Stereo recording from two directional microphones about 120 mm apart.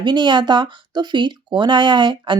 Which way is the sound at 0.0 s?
40° right (ahead or behind).